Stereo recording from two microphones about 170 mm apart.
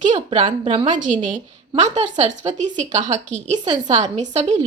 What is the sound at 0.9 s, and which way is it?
A woman's voice, 50° right (ahead or behind).